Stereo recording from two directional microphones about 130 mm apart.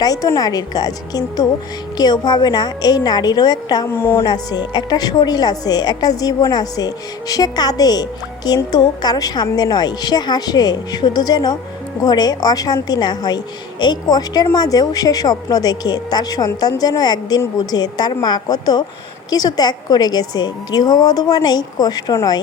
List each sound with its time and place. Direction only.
0.0 s a woman's voice: 25° left (ahead or behind)
3.8 s speech: 20° left (ahead or behind)
4.2 s a woman's voice: 30° left (ahead or behind)